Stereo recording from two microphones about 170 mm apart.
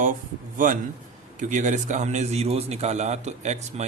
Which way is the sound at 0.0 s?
50° right (ahead or behind).